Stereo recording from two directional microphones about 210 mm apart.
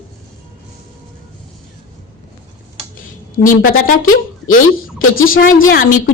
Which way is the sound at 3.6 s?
40° left (ahead or behind).